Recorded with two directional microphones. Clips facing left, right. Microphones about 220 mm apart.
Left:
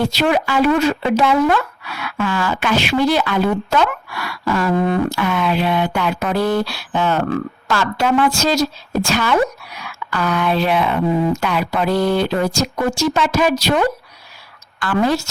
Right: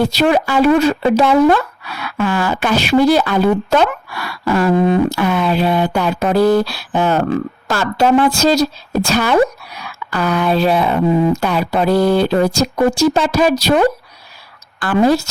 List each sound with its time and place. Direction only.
0.2 s speech: 40° right (ahead or behind)